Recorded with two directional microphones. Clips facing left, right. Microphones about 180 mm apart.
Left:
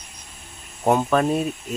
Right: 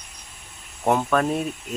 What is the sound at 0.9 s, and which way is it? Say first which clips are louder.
Speech: left 2 dB; 5° left (ahead or behind).